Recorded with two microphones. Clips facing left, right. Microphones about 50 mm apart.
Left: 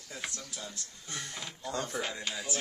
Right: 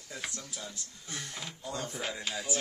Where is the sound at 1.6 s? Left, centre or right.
Left.